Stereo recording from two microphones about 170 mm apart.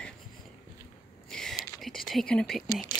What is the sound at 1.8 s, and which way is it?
Speech, centre (ahead or behind).